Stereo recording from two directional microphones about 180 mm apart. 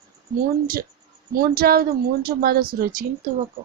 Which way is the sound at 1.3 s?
55° right (ahead or behind).